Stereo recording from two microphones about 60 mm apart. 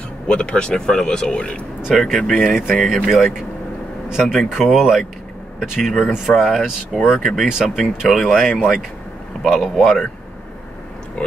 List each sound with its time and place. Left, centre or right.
0.3 s speech: centre
2.0 s speech: centre